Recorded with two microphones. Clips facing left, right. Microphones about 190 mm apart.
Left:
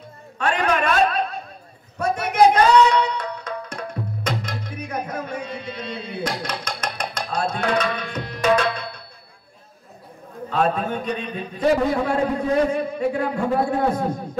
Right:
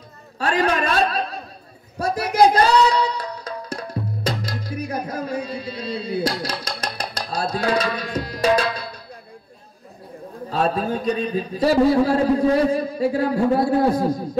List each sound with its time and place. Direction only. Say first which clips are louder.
0.4 s a sound: right 1 dB; 35° right (ahead or behind)
2.0 s music: right 1 dB; 35° right (ahead or behind)
10.5 s a man's voice: even; 35° right (ahead or behind)